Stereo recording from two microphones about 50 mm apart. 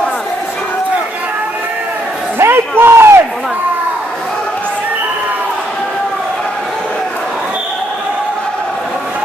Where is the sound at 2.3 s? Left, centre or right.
Right.